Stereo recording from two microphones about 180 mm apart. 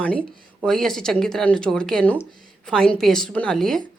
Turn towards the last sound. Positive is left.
turn(degrees=5)  # may be behind; listen again after turning